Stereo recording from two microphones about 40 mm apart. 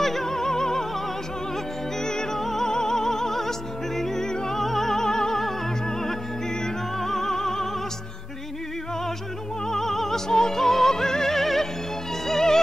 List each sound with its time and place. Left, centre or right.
0.0 s music: centre
2.0 s music: centre
9.7 s music: centre